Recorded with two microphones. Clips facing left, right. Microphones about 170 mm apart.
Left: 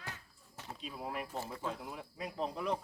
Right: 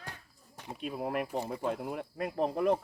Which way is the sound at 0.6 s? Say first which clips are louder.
Right 4 dB; 15° right (ahead or behind).